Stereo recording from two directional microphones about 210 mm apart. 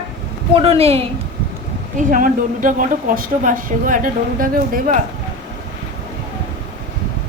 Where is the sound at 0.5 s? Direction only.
30° right (ahead or behind).